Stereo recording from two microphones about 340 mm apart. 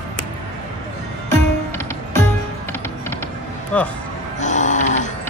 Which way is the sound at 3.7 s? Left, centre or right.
Centre.